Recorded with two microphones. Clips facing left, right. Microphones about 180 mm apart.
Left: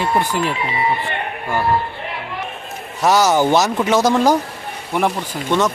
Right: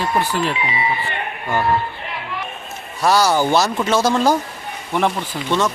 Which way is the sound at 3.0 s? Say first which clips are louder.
Left 2 dB; 20° left (ahead or behind).